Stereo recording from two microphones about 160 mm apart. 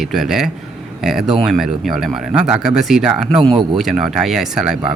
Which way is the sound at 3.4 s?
30° right (ahead or behind).